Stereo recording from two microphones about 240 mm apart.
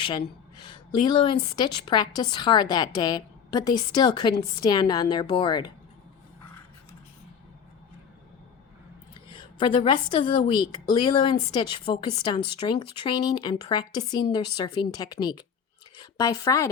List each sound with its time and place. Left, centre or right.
0.6 s a woman's voice: centre
9.3 s a woman's voice: centre